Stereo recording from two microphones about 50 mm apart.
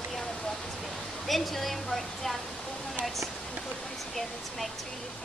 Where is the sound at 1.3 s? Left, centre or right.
Centre.